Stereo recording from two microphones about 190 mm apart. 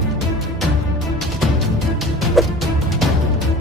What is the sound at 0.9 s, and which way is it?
Music, centre (ahead or behind).